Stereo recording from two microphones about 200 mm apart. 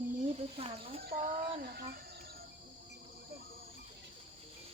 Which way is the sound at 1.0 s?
45° right (ahead or behind).